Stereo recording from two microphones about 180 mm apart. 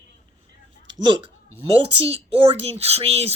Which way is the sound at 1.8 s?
35° right (ahead or behind).